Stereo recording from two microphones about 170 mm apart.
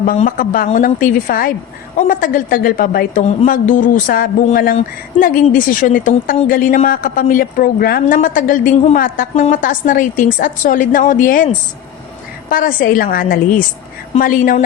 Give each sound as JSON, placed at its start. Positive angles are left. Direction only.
{"t": 0.0, "sound": "a woman's voice", "side_deg": 55}
{"t": 12.5, "sound": "a woman's voice", "side_deg": 55}